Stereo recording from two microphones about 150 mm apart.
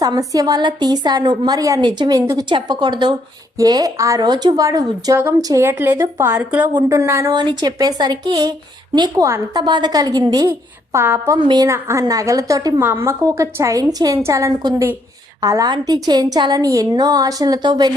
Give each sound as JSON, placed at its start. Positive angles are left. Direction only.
{"t": 0.0, "sound": "speech", "side_deg": -25}
{"t": 7.3, "sound": "a woman's voice", "side_deg": -30}
{"t": 11.3, "sound": "speech", "side_deg": -30}